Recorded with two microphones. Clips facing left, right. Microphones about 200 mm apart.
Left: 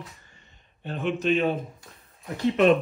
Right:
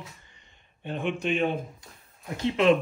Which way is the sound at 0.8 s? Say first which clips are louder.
Left 3 dB; 15° right (ahead or behind).